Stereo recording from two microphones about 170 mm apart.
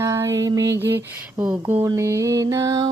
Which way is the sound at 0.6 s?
90° right.